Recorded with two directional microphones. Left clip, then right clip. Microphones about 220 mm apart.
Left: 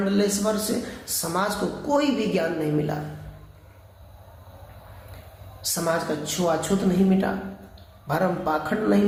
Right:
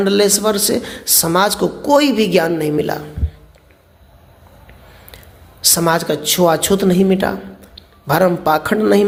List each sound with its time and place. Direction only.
0.0 s a woman's voice: 45° right (ahead or behind)
5.6 s a woman's voice: 45° right (ahead or behind)